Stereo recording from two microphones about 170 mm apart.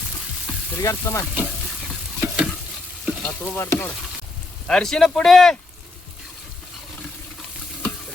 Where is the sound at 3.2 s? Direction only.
10° left (ahead or behind).